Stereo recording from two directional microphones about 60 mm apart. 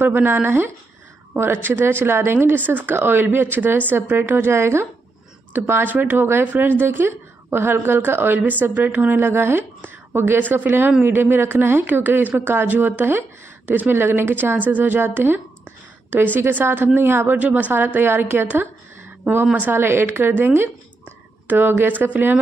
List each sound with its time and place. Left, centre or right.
0.0 s speech: right
11.8 s speech: right
15.0 s a sound: right
16.3 s speech: right